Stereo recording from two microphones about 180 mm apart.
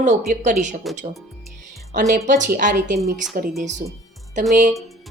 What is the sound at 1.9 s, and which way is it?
Speech, 45° right (ahead or behind).